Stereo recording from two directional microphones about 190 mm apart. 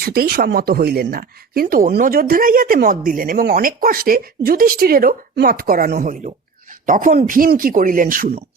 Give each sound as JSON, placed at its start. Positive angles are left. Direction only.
{"t": 0.0, "sound": "speech", "side_deg": -55}